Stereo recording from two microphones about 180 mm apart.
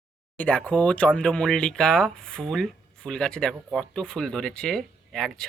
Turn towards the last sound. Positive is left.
turn(degrees=5)  # may be behind; listen again after turning